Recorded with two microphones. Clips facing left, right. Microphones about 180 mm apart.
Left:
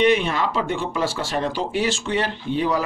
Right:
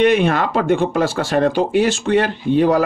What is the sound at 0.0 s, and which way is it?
Speech, 50° right (ahead or behind).